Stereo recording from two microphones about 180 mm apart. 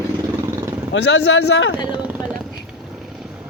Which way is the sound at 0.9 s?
90° left.